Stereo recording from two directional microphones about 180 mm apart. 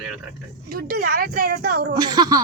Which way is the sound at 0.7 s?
50° right (ahead or behind).